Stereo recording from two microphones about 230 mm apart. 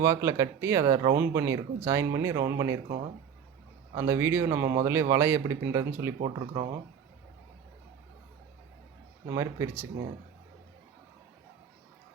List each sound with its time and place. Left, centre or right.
0.0 s speech: centre
3.9 s speech: centre
9.2 s speech: centre